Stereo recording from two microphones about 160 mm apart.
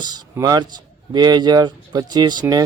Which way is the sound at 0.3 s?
25° right (ahead or behind).